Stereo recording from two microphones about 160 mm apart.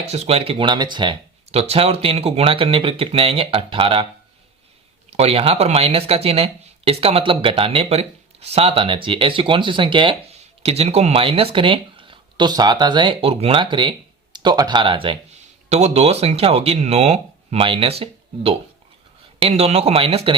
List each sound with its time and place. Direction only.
0.1 s speech: 40° right (ahead or behind)
1.5 s speech: 40° right (ahead or behind)
5.1 s speech: 40° right (ahead or behind)